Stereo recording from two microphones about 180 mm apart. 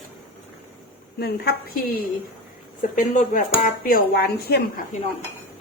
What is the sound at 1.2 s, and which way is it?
Speech, 60° left (ahead or behind).